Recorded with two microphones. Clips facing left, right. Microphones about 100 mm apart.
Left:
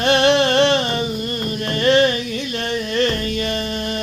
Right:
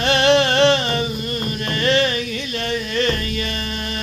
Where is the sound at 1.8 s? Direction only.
35° left (ahead or behind).